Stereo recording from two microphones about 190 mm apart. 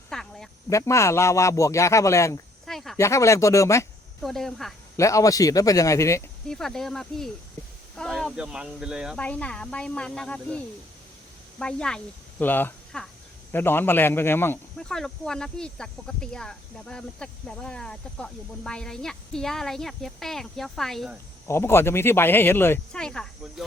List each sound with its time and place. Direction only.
0.1 s cricket: centre (ahead or behind)
0.7 s speech: 15° left (ahead or behind)
2.6 s a sound: centre (ahead or behind)
3.0 s speech: 15° left (ahead or behind)
4.2 s speech: centre (ahead or behind)
4.9 s speech: 15° left (ahead or behind)
6.5 s speech: centre (ahead or behind)
9.1 s speech: 5° left (ahead or behind)
11.6 s speech: 5° left (ahead or behind)
21.4 s speech: 15° left (ahead or behind)